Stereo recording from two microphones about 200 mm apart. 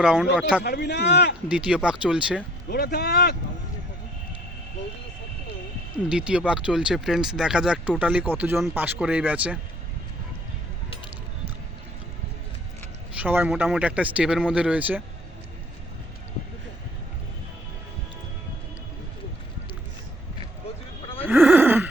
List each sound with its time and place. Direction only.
0.0 s speech: 5° right (ahead or behind)
0.6 s a man's voice: 55° left (ahead or behind)
1.5 s speech: 5° right (ahead or behind)
2.6 s a man's voice: 50° left (ahead or behind)
6.1 s speech: 5° right (ahead or behind)
13.1 s a man's voice: 10° right (ahead or behind)
21.2 s neigh: 10° right (ahead or behind)